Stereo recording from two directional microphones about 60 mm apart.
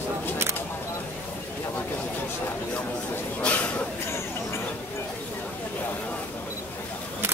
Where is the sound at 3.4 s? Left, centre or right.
Left.